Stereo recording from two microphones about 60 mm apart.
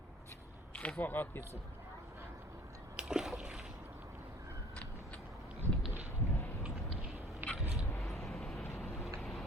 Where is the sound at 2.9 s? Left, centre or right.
Centre.